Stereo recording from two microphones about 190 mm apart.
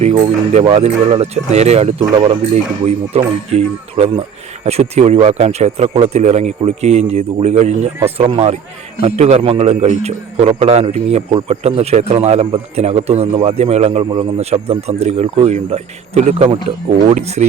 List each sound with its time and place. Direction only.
0.0 s a man's voice: 35° right (ahead or behind)